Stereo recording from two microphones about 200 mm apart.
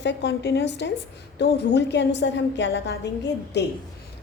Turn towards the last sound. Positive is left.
turn(degrees=55)  # may be behind; listen again after turning